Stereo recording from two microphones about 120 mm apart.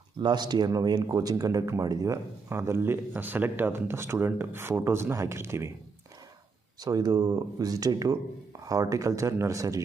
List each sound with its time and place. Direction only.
0.2 s speech: 35° right (ahead or behind)
6.7 s speech: 35° right (ahead or behind)